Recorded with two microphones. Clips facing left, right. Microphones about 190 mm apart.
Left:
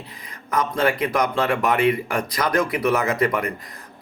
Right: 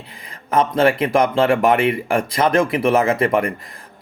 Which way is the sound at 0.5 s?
25° right (ahead or behind).